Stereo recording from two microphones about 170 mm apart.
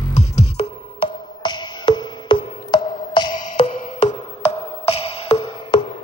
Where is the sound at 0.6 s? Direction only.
30° left (ahead or behind).